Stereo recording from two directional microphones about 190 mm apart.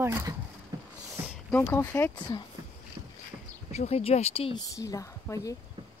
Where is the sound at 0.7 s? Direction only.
15° right (ahead or behind).